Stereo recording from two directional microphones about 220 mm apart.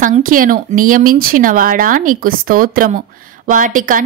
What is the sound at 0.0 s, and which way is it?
A woman's voice, 40° right (ahead or behind).